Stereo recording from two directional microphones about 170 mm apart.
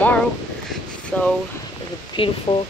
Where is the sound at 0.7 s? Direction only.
5° left (ahead or behind).